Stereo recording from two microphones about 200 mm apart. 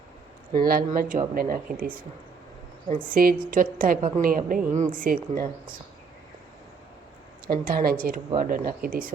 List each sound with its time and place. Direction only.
0.5 s a woman's voice: 45° right (ahead or behind)
7.4 s a woman's voice: 45° right (ahead or behind)